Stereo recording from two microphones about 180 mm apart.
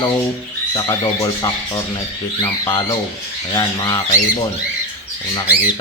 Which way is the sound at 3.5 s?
20° left (ahead or behind).